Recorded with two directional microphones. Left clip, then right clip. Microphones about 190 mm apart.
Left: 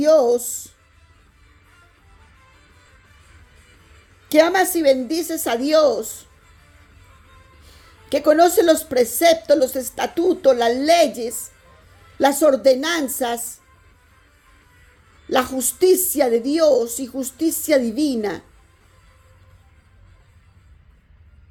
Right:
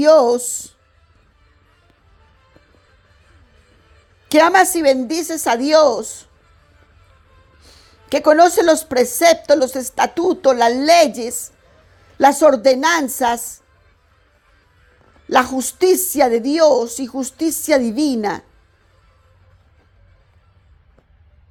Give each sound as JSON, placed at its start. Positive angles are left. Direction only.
{"t": 0.0, "sound": "speech", "side_deg": -35}
{"t": 4.3, "sound": "a woman's voice", "side_deg": -35}
{"t": 7.6, "sound": "a woman's voice", "side_deg": -25}
{"t": 15.3, "sound": "a woman's voice", "side_deg": -25}